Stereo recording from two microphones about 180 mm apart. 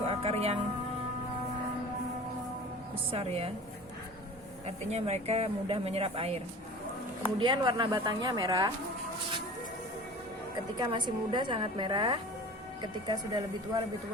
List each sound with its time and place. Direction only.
0.0 s music: 35° right (ahead or behind)
3.1 s a woman's voice: 35° right (ahead or behind)
4.9 s a woman's voice: 35° right (ahead or behind)
10.8 s a woman's voice: 25° right (ahead or behind)